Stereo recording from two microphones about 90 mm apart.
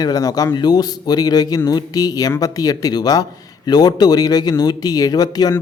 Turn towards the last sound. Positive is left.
turn(degrees=45)  # may be behind; listen again after turning